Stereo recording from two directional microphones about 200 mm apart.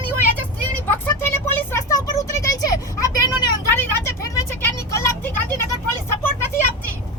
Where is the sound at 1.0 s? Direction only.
10° left (ahead or behind).